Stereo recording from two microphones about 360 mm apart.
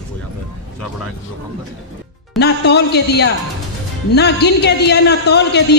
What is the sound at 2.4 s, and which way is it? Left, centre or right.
A man's voice, left.